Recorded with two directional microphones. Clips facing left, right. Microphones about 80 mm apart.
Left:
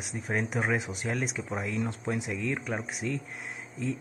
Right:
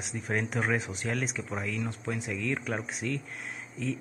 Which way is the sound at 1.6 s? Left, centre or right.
Left.